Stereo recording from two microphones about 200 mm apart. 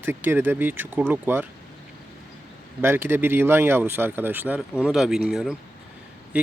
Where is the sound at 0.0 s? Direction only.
10° right (ahead or behind).